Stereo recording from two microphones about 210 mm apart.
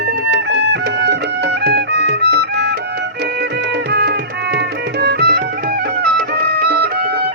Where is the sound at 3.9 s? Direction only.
50° right (ahead or behind).